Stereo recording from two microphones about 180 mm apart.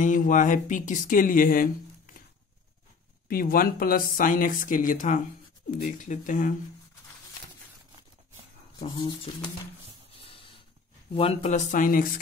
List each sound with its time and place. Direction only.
0.0 s speech: 45° left (ahead or behind)
3.3 s speech: 50° left (ahead or behind)
8.7 s speech: 25° left (ahead or behind)
10.2 s a sound: 30° left (ahead or behind)
11.1 s speech: 35° left (ahead or behind); by 12.1 s 50° left (ahead or behind)